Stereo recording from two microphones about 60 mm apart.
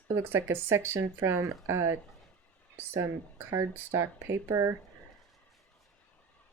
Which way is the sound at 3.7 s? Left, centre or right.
Right.